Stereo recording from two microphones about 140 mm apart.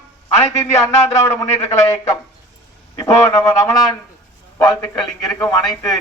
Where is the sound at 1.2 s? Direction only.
20° left (ahead or behind).